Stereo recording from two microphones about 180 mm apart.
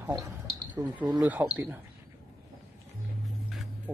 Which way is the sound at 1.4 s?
10° right (ahead or behind).